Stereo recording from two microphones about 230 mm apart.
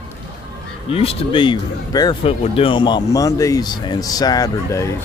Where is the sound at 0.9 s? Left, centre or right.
Left.